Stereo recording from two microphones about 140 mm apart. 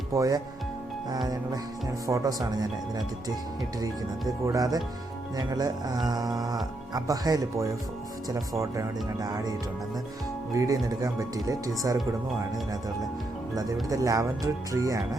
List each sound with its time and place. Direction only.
0.1 s speech: 25° right (ahead or behind)
2.0 s speech: 25° right (ahead or behind)
4.4 s speech: 25° right (ahead or behind)
13.9 s speech: 25° right (ahead or behind)